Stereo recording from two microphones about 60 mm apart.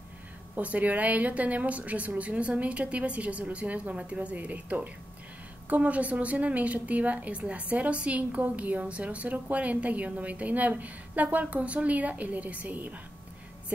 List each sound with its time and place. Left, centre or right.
0.6 s a woman's voice: right